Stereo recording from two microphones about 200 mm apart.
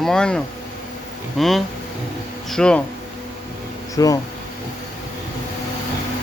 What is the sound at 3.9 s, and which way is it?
Speech, 15° left (ahead or behind).